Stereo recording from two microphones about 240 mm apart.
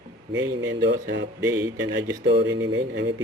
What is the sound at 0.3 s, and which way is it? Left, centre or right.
Speech, right.